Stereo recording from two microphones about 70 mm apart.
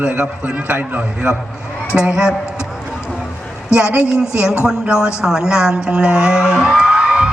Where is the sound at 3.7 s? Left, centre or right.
Centre.